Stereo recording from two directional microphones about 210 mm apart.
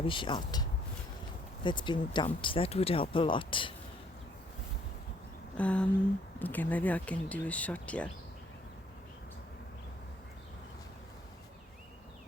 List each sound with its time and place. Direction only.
0.0 s speech: 25° left (ahead or behind)
1.6 s speech: 20° left (ahead or behind)
5.5 s a sound: 5° left (ahead or behind)
6.4 s speech: 10° left (ahead or behind)